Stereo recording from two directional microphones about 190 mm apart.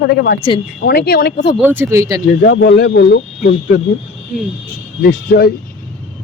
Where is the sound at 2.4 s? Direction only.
70° left (ahead or behind).